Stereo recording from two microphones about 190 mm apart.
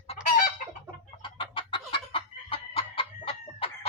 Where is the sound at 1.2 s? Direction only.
25° left (ahead or behind).